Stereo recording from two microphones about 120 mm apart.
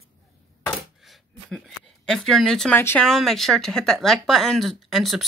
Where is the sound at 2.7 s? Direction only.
20° left (ahead or behind).